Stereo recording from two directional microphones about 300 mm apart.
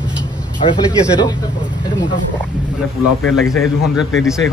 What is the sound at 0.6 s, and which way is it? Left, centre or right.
Speech, centre.